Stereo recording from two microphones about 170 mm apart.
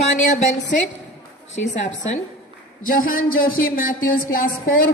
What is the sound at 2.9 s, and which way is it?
A woman's voice, 55° left (ahead or behind).